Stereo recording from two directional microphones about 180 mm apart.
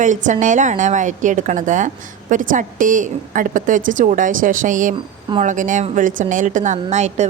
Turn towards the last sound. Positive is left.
turn(degrees=-40)  # may be behind; listen again after turning